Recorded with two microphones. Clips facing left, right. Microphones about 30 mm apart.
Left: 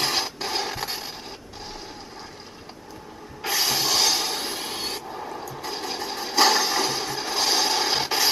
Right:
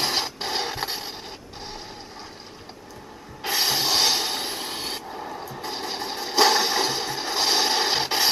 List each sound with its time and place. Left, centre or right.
0.5 s mechanisms: right
3.4 s a sound: right
5.1 s vehicle: centre
5.6 s mechanisms: right